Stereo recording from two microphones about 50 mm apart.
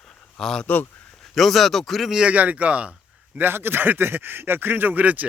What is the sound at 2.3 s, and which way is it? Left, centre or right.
Speech, right.